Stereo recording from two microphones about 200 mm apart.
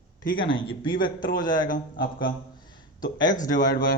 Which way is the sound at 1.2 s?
40° left (ahead or behind).